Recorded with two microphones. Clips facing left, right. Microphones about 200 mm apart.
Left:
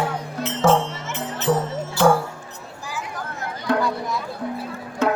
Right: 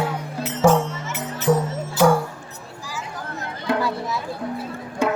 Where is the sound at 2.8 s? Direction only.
55° left (ahead or behind).